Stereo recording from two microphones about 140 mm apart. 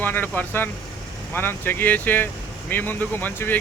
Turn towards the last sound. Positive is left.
turn(degrees=15)  # may be behind; listen again after turning